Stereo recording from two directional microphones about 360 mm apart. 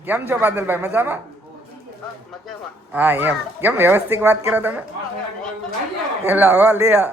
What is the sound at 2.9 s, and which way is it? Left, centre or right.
Speech, centre.